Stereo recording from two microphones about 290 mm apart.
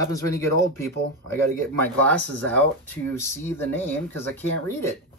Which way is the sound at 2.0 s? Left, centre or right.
Centre.